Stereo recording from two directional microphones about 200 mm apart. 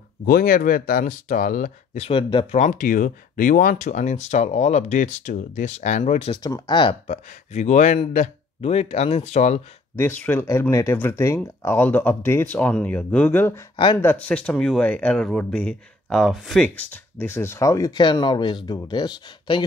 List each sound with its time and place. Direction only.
0.2 s speech: 45° left (ahead or behind)
9.9 s speech: 10° left (ahead or behind)